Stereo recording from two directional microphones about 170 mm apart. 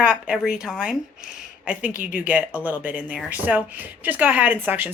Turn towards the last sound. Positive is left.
turn(degrees=-10)  # may be behind; listen again after turning